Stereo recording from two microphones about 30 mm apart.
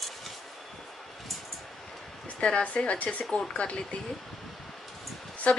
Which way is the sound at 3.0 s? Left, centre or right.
Left.